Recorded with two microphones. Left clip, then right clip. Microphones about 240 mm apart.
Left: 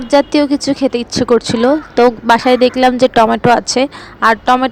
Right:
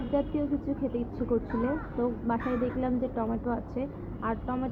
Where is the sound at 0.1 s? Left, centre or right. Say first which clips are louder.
Left 19 dB; left.